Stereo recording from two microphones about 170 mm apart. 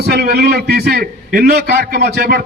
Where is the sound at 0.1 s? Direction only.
65° right (ahead or behind).